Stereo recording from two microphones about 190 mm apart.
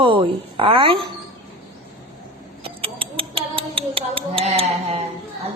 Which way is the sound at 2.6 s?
30° right (ahead or behind).